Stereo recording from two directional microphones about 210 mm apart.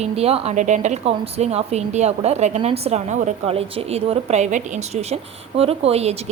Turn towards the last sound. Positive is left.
turn(degrees=-30)  # may be behind; listen again after turning